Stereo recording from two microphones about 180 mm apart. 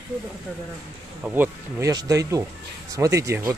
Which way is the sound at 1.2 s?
10° right (ahead or behind).